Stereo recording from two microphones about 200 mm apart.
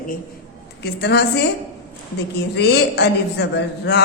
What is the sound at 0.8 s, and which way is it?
Speech, 55° left (ahead or behind).